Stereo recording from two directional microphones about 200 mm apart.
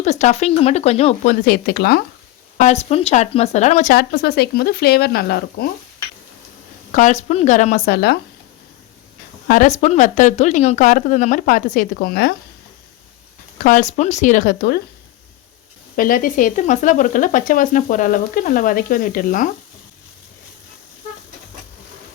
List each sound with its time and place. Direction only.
0.0 s speech: 35° left (ahead or behind); by 2.0 s 50° left (ahead or behind)
2.6 s speech: 35° left (ahead or behind)
3.9 s speech: 50° left (ahead or behind)
6.9 s speech: 35° left (ahead or behind)
7.9 s speech: 55° left (ahead or behind)
9.5 s speech: 40° left (ahead or behind)
13.6 s speech: 40° left (ahead or behind)
16.0 s speech: 40° left (ahead or behind)